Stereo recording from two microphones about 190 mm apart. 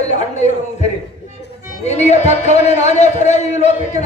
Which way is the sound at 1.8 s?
35° left (ahead or behind).